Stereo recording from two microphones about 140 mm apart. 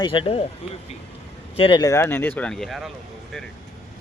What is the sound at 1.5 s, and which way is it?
Speech, 40° left (ahead or behind).